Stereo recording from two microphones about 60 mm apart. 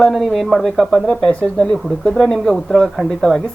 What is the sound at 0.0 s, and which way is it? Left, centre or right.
Speech, centre.